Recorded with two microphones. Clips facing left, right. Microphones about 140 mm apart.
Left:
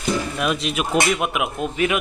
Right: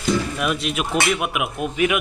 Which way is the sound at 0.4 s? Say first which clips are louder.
Left 1 dB; centre (ahead or behind).